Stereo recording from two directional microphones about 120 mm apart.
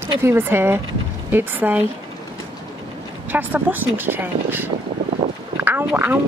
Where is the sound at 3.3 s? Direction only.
15° right (ahead or behind).